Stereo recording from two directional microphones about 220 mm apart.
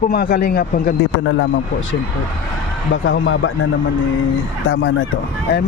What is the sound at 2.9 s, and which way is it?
Speech, 60° left (ahead or behind).